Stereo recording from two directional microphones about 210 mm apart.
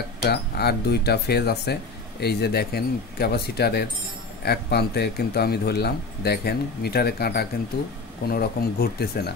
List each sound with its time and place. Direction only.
0.2 s speech: 50° left (ahead or behind)